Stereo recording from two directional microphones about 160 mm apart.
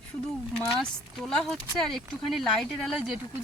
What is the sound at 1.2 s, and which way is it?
Speech, 5° left (ahead or behind).